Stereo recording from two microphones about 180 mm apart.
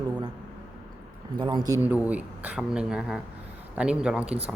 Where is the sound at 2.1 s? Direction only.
10° right (ahead or behind).